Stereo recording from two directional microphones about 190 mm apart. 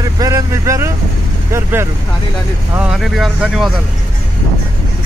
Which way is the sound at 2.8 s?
5° right (ahead or behind).